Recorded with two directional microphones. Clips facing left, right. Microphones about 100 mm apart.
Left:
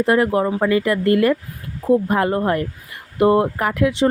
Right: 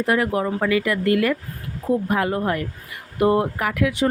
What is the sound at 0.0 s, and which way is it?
Speech, 30° left (ahead or behind).